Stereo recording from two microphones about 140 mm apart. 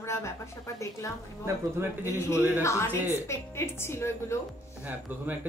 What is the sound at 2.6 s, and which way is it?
A woman's voice, 20° left (ahead or behind).